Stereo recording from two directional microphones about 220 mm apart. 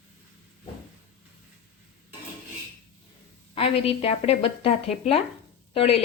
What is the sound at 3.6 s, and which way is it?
A woman's voice, 25° left (ahead or behind).